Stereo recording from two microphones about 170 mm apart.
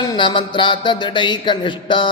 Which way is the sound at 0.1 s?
30° left (ahead or behind).